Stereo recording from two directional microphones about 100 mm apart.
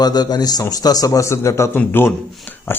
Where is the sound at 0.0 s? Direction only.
40° left (ahead or behind).